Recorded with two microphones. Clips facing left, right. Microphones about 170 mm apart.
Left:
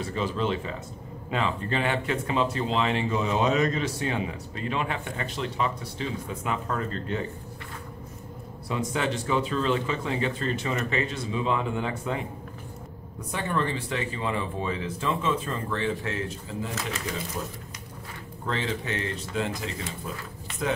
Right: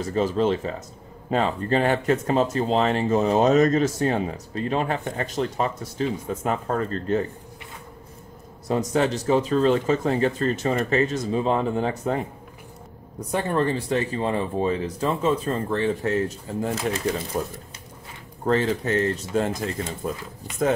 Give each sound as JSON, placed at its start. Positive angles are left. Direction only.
{"t": 0.0, "sound": "speech", "side_deg": -40}
{"t": 8.6, "sound": "speech", "side_deg": -40}
{"t": 13.3, "sound": "speech", "side_deg": -40}